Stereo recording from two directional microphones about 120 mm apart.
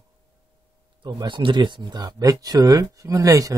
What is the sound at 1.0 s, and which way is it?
Speech, 40° right (ahead or behind).